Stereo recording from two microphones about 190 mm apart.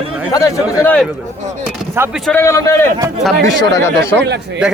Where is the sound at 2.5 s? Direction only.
15° left (ahead or behind).